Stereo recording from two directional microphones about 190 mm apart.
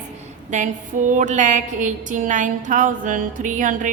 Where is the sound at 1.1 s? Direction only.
40° right (ahead or behind).